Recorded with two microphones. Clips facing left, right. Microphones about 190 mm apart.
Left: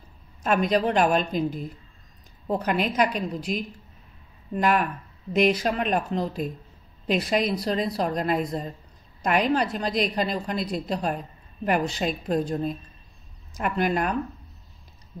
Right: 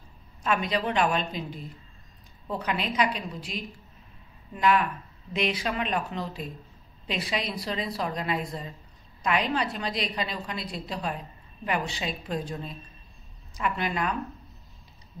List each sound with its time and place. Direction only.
0.4 s a woman's voice: 45° left (ahead or behind)